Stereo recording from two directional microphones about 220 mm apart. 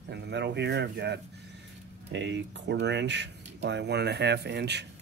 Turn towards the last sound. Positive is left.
turn(degrees=-50)  # may be behind; listen again after turning